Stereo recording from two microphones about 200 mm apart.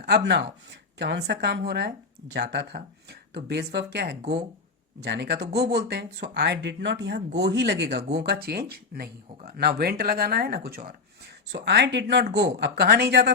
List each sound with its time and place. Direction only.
0.0 s speech: 55° right (ahead or behind)
11.6 s speech: 60° right (ahead or behind)